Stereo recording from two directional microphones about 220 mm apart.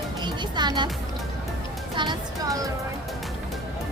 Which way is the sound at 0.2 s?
20° right (ahead or behind).